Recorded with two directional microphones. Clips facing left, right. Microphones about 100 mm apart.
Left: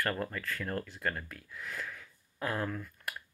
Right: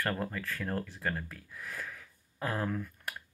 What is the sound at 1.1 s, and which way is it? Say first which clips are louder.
Speech: right 3 dB; 40° right (ahead or behind).